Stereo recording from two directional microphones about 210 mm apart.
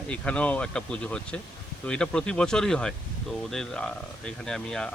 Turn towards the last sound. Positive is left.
turn(degrees=5)  # may be behind; listen again after turning